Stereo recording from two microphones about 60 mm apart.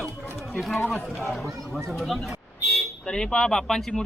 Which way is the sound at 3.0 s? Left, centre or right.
Centre.